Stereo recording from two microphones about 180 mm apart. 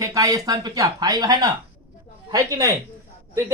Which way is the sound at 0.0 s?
20° right (ahead or behind).